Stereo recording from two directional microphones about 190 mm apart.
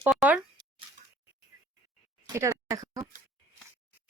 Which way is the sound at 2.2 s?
15° right (ahead or behind).